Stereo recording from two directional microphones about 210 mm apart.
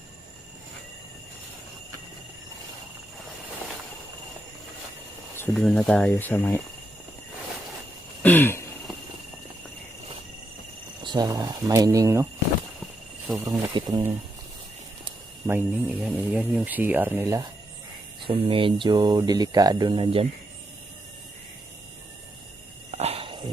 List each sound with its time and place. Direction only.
5.4 s speech: 5° left (ahead or behind)
8.2 s a sound: 10° left (ahead or behind)
11.0 s speech: 20° right (ahead or behind)
13.4 s speech: 15° right (ahead or behind)
15.4 s speech: 10° right (ahead or behind)
18.3 s speech: 25° right (ahead or behind)
22.9 s a sound: 30° right (ahead or behind)